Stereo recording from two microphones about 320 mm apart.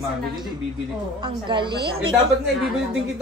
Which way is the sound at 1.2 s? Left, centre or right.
Centre.